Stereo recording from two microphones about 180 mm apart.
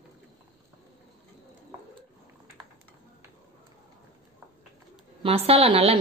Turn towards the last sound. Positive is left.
turn(degrees=-30)  # may be behind; listen again after turning